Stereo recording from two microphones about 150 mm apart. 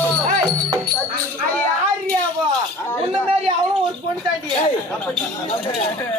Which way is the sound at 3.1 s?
45° right (ahead or behind).